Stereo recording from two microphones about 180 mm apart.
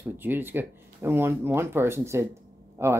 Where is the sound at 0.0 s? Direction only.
10° right (ahead or behind).